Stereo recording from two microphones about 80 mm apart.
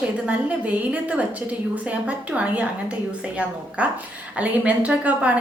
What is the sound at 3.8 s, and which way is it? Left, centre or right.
A woman's voice, centre.